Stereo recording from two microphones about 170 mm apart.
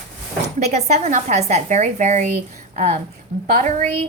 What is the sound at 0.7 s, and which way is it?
Speech, 40° right (ahead or behind).